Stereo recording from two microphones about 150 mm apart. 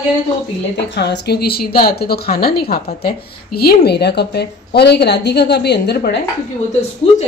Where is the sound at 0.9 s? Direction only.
90° left.